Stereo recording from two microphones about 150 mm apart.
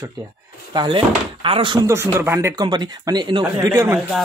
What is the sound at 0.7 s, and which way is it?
Speech, 35° right (ahead or behind).